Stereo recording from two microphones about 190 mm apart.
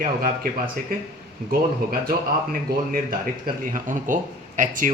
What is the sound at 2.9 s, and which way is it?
Speech, 50° right (ahead or behind).